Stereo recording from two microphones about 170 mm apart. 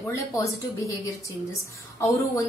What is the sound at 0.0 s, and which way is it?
A woman's voice, 20° left (ahead or behind).